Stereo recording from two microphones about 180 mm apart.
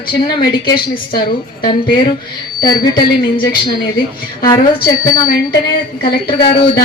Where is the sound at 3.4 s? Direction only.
55° left (ahead or behind).